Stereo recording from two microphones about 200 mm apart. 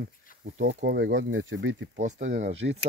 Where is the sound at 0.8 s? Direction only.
60° right (ahead or behind).